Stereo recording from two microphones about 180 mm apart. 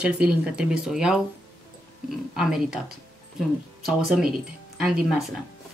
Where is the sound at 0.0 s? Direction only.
5° right (ahead or behind).